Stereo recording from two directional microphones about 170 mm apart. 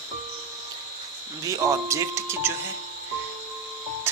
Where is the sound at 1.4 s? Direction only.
20° right (ahead or behind).